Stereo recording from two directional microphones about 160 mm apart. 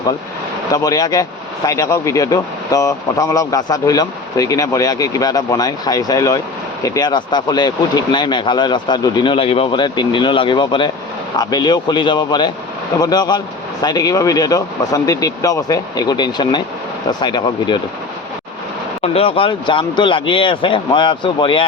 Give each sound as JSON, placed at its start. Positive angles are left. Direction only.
{"t": 0.7, "sound": "speech", "side_deg": 20}
{"t": 19.0, "sound": "speech", "side_deg": 35}